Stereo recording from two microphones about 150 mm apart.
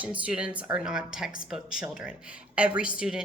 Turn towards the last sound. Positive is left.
turn(degrees=-5)  # may be behind; listen again after turning